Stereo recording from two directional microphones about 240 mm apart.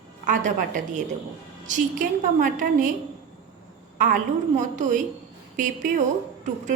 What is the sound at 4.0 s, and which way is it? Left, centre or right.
A woman's voice, right.